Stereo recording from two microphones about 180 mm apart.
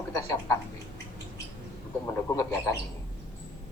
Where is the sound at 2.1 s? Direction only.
15° left (ahead or behind).